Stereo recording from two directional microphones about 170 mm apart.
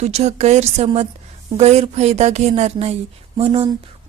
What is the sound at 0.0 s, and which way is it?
Speech, 40° right (ahead or behind).